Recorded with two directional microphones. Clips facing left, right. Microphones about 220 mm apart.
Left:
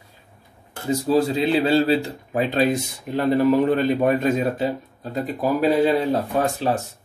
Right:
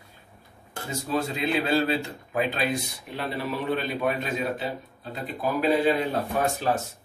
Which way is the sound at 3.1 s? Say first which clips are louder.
Left 13 dB; 45° left (ahead or behind).